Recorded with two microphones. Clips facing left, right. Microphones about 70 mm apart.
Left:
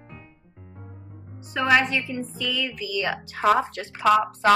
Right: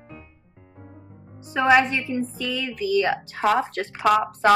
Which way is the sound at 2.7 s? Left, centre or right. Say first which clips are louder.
Right 6 dB; right.